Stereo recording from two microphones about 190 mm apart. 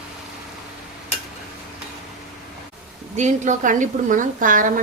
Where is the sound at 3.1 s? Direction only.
40° right (ahead or behind).